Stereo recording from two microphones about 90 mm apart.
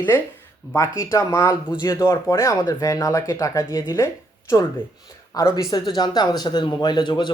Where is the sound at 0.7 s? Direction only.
35° left (ahead or behind).